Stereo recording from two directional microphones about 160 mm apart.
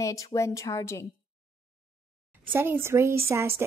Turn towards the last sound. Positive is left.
turn(degrees=-15)  # may be behind; listen again after turning